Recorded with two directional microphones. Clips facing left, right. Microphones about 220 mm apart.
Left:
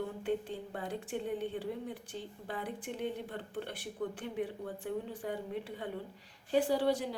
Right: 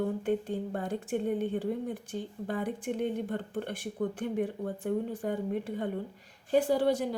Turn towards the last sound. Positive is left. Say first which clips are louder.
# right 4 dB
turn(degrees=-50)  # may be behind; listen again after turning